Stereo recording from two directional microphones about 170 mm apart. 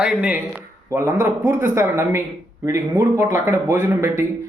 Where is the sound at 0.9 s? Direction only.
15° right (ahead or behind).